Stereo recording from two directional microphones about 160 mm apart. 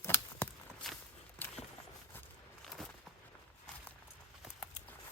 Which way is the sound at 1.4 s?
15° left (ahead or behind).